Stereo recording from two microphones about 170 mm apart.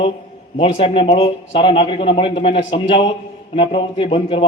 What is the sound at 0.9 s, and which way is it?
A man's voice, 30° left (ahead or behind).